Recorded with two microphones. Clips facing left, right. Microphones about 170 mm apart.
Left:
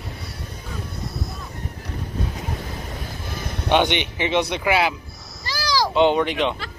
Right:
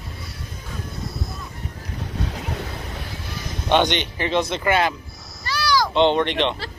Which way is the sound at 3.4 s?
60° left (ahead or behind).